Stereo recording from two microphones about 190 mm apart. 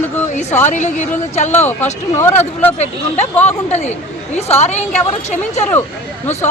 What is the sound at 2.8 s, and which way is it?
A woman's voice, 35° left (ahead or behind).